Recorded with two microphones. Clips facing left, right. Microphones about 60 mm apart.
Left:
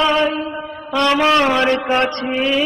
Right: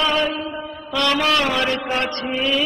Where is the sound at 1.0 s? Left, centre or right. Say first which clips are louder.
Left 5 dB; left.